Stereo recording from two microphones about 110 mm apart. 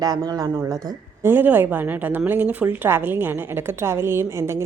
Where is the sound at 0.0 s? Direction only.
35° right (ahead or behind).